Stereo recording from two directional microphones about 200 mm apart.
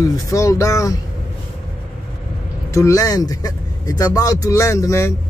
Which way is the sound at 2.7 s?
15° left (ahead or behind).